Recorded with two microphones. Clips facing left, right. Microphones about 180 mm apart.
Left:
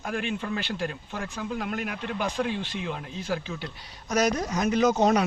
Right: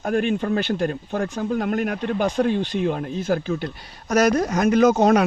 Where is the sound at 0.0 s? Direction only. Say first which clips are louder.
Right 9 dB; 40° right (ahead or behind).